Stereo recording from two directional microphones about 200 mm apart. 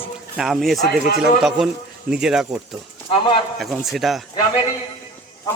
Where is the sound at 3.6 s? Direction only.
Centre (ahead or behind).